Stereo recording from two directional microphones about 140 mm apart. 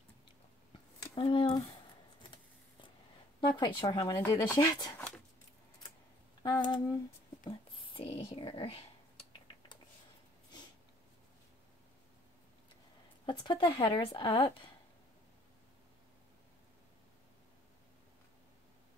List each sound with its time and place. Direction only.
1.1 s a woman's voice: 40° left (ahead or behind)
3.3 s speech: 35° left (ahead or behind)
4.9 s a sound: 10° left (ahead or behind)
6.4 s a woman's voice: 30° left (ahead or behind)
13.2 s a woman's voice: 35° left (ahead or behind)